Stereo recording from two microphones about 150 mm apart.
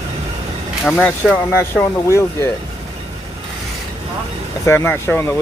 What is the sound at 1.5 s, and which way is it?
Speech, 15° left (ahead or behind).